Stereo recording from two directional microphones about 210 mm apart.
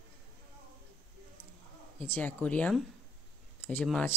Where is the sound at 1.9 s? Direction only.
10° left (ahead or behind).